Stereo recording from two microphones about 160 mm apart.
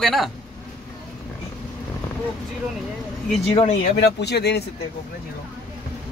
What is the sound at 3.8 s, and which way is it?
Speech, 90° left.